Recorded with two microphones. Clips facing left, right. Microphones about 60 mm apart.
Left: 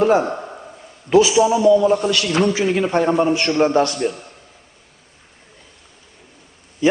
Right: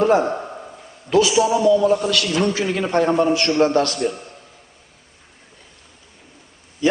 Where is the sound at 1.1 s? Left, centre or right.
Centre.